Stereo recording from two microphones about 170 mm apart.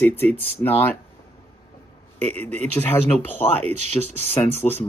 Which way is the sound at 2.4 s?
10° left (ahead or behind).